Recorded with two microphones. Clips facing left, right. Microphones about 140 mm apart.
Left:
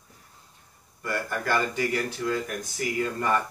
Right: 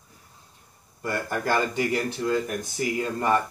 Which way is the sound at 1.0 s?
35° right (ahead or behind).